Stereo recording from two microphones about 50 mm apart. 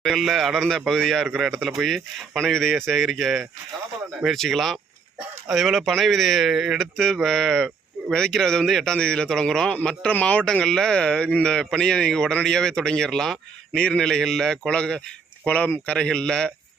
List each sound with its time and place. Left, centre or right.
0.0 s speech: centre
6.9 s a man's voice: centre
13.7 s a man's voice: centre
14.7 s a man's voice: centre